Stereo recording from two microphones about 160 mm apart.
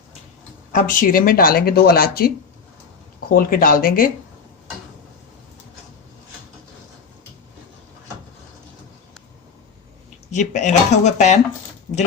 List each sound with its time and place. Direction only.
0.7 s speech: 60° left (ahead or behind)
3.3 s speech: 65° left (ahead or behind)
10.3 s speech: 50° left (ahead or behind)